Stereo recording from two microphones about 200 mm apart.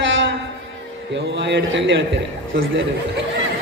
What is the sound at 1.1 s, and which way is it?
A man's voice, 60° right (ahead or behind).